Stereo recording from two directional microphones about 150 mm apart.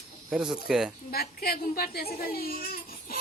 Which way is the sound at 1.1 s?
90° left.